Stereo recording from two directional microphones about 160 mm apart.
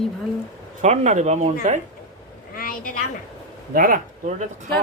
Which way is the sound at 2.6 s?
60° left (ahead or behind).